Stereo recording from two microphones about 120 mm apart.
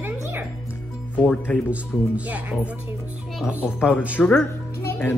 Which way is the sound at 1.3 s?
10° left (ahead or behind).